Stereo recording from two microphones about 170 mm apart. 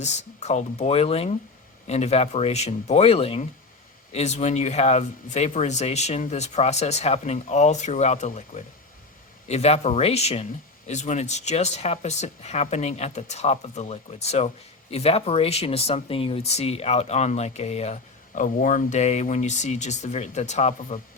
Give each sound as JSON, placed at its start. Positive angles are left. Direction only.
{"t": 0.0, "sound": "speech", "side_deg": 40}